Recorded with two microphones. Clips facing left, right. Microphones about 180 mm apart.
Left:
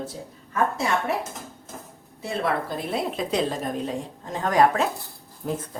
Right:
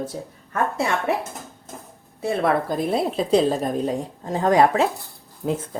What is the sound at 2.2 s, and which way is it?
Speech, 50° right (ahead or behind).